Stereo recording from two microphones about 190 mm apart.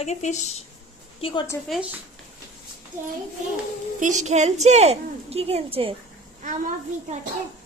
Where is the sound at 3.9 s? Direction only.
40° right (ahead or behind).